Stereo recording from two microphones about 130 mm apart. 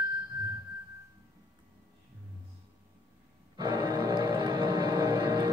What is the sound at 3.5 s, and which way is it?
Music, 30° right (ahead or behind).